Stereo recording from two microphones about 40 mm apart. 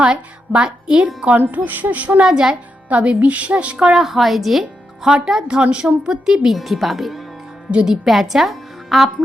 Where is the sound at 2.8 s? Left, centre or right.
Right.